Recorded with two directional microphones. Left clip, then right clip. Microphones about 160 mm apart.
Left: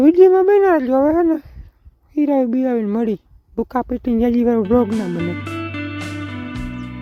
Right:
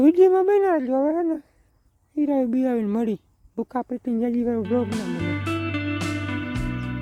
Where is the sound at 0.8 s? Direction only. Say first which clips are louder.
Left 7 dB; 50° left (ahead or behind).